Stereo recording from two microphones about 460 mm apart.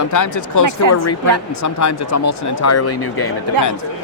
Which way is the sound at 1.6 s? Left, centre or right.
Left.